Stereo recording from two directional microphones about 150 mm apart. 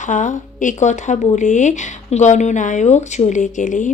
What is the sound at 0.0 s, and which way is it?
Speech, 55° left (ahead or behind).